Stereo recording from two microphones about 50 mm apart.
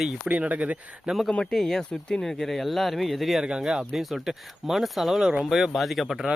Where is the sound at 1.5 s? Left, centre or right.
Centre.